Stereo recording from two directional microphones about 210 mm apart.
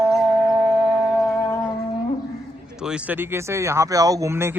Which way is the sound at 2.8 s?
5° right (ahead or behind).